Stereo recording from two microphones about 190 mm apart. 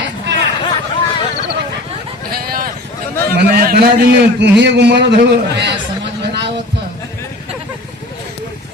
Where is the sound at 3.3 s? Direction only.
50° right (ahead or behind).